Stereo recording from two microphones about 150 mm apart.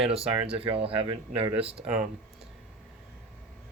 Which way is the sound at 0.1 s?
40° right (ahead or behind).